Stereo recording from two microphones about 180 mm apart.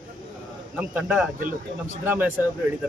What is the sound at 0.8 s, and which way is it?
Speech, 5° right (ahead or behind).